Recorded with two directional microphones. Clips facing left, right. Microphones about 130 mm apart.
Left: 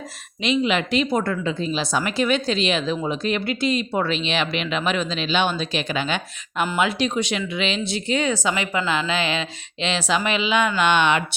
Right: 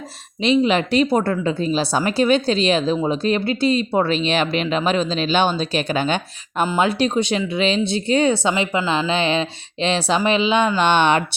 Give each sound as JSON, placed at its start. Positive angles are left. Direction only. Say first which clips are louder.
{"t": 0.4, "sound": "a woman's voice", "louder": "right 4 dB", "side_deg": -35}